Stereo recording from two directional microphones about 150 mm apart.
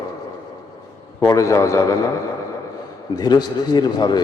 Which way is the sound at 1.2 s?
20° left (ahead or behind).